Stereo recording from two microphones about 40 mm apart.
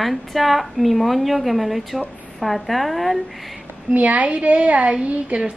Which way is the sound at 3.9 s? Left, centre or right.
Right.